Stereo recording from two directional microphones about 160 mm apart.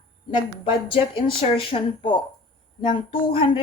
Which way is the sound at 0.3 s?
30° left (ahead or behind).